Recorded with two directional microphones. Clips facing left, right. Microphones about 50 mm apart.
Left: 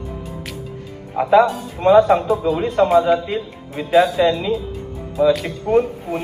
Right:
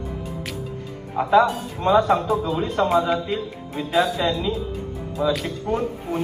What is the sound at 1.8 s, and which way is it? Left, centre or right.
Speech, left.